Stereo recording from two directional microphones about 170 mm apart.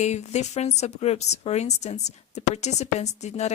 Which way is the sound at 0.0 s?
40° left (ahead or behind).